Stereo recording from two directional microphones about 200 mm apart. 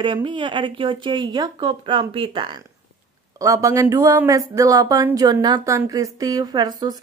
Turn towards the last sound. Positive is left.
turn(degrees=-20)  # may be behind; listen again after turning